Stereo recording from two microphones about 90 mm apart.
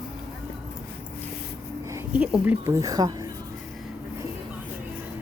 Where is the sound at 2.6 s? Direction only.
40° right (ahead or behind).